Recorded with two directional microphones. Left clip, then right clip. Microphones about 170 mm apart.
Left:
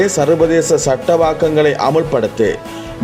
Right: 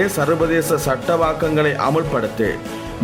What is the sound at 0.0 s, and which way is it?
A man's voice, 10° left (ahead or behind).